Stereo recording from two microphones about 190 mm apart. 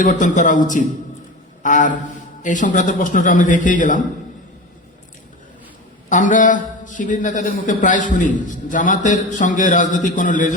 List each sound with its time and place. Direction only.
0.0 s a man's voice: 40° left (ahead or behind)
6.1 s a man's voice: 40° left (ahead or behind)